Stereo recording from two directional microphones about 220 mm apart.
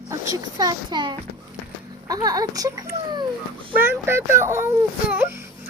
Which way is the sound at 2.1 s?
15° right (ahead or behind).